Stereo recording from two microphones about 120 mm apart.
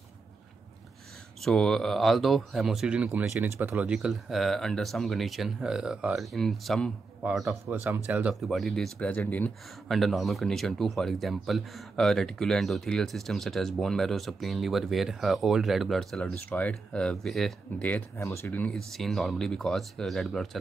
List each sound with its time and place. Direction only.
1.4 s speech: 5° left (ahead or behind)
3.3 s speech: 20° right (ahead or behind); by 6.9 s centre (ahead or behind)
7.4 s speech: 20° right (ahead or behind)
8.4 s speech: centre (ahead or behind)
9.1 s speech: 15° left (ahead or behind)
9.8 s speech: centre (ahead or behind)
16.4 s speech: 10° left (ahead or behind)
18.1 s speech: 25° left (ahead or behind)
18.8 s speech: centre (ahead or behind)